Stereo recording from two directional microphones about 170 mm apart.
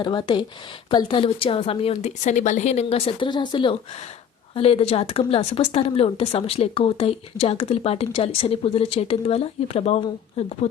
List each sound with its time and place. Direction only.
0.0 s speech: 25° left (ahead or behind)